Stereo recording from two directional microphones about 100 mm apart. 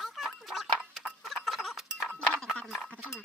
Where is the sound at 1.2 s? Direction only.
Centre (ahead or behind).